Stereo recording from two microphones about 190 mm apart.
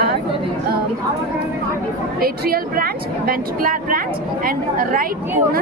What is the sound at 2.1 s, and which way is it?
Speech, 50° right (ahead or behind).